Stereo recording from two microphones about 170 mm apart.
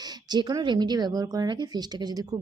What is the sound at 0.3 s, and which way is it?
A woman's voice, 25° right (ahead or behind).